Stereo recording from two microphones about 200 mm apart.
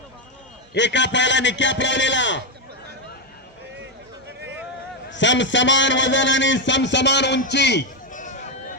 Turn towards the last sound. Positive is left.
turn(degrees=60)  # may be behind; listen again after turning